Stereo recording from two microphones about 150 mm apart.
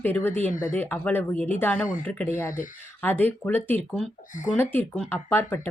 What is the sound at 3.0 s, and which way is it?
A woman's voice, 10° left (ahead or behind).